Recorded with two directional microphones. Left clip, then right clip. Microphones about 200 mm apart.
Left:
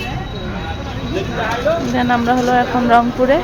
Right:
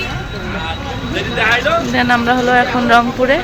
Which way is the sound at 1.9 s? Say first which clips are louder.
Right 2 dB; 10° left (ahead or behind).